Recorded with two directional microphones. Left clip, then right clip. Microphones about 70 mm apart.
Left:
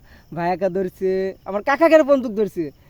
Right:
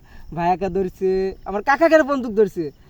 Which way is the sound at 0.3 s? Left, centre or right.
Left.